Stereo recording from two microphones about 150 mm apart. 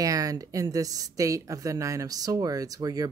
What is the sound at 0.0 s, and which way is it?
Speech, 25° right (ahead or behind).